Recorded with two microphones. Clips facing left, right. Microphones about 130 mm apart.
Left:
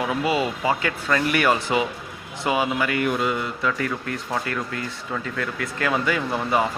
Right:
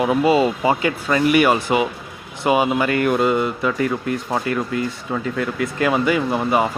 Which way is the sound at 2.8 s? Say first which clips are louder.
Right 5 dB; 45° right (ahead or behind).